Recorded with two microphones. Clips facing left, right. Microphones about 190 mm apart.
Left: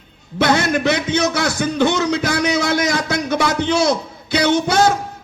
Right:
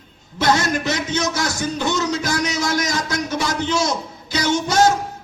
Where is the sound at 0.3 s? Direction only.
60° left (ahead or behind).